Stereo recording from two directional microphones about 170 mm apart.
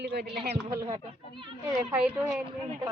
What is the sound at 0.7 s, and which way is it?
Speech, 20° right (ahead or behind).